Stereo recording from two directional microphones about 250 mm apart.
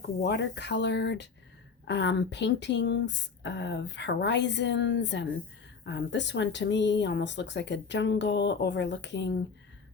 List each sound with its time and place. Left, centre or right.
0.2 s speech: left